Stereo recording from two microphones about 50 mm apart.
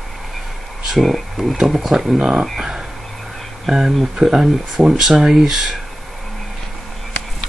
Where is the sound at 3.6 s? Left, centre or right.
Centre.